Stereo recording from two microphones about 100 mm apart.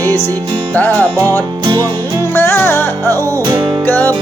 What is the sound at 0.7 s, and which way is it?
Music, 15° left (ahead or behind).